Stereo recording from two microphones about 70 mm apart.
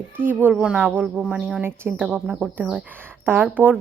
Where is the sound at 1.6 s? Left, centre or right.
Right.